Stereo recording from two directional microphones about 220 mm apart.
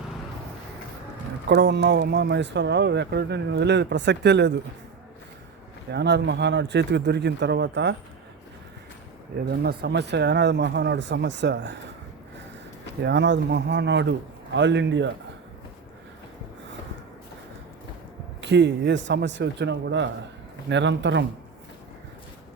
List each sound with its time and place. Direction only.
1.5 s speech: 50° right (ahead or behind)
5.9 s speech: 50° right (ahead or behind)
9.5 s speech: 50° right (ahead or behind)
13.0 s speech: 50° right (ahead or behind)
18.3 s speech: 55° right (ahead or behind)